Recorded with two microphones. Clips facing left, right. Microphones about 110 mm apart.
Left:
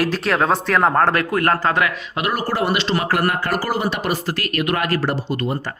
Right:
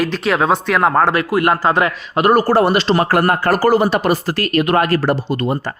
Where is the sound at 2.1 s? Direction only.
40° right (ahead or behind).